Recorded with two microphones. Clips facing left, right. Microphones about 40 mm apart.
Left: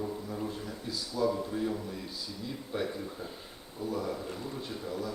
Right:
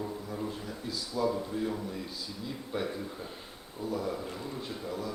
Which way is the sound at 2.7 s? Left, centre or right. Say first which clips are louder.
Even; centre.